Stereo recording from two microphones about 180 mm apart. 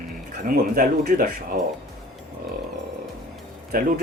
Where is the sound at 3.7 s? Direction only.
55° right (ahead or behind).